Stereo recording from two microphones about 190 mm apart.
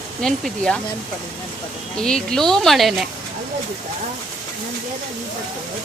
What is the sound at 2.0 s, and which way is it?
Speech, 5° left (ahead or behind).